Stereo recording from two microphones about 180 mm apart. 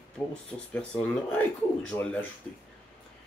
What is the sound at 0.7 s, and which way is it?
Speech, 10° left (ahead or behind).